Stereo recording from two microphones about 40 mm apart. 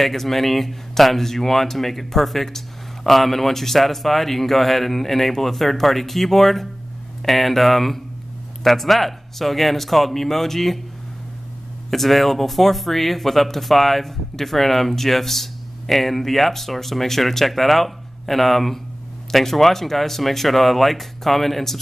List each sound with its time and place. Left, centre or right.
0.0 s speech: centre
11.9 s speech: centre